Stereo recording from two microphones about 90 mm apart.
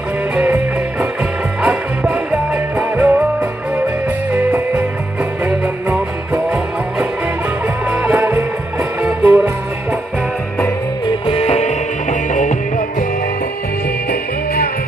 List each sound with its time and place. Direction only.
1.6 s music: 15° right (ahead or behind)
5.4 s music: 20° right (ahead or behind)
7.9 s music: 15° right (ahead or behind)
8.2 s music: 30° right (ahead or behind)
9.0 s music: 10° right (ahead or behind)